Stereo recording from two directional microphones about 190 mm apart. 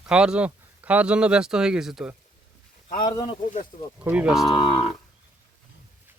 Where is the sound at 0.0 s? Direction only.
5° right (ahead or behind).